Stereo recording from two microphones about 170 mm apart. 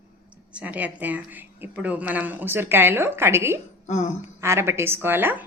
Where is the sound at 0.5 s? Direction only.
10° right (ahead or behind).